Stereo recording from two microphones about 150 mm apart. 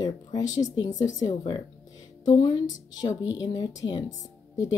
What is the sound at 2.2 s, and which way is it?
Speech, 35° left (ahead or behind).